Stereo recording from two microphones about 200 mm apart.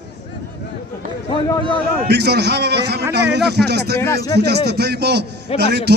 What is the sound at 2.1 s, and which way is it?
A man's voice, 55° right (ahead or behind).